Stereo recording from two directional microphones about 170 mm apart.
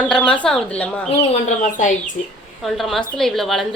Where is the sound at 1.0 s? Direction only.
45° left (ahead or behind).